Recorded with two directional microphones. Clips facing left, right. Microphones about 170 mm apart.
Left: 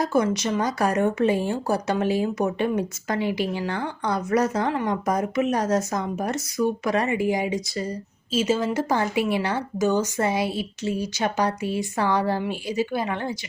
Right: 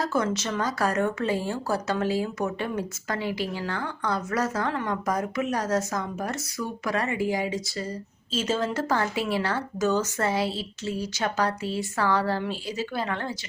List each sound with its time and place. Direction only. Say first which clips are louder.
0.0 s speech: left 4 dB; 15° left (ahead or behind)